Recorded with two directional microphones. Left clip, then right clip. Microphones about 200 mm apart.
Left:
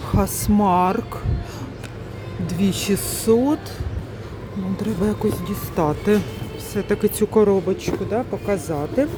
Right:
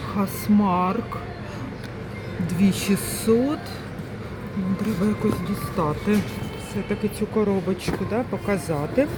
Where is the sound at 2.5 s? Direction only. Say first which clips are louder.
Left 2 dB; 20° left (ahead or behind).